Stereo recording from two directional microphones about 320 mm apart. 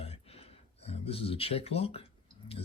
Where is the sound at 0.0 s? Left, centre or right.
Centre.